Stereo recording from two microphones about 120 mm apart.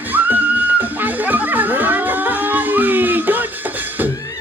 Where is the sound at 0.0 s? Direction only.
15° right (ahead or behind).